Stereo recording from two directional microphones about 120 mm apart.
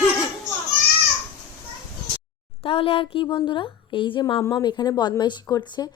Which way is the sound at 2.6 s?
50° left (ahead or behind).